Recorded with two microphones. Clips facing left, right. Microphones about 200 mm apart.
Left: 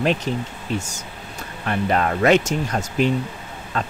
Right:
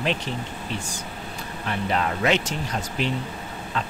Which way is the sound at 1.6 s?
50° left (ahead or behind).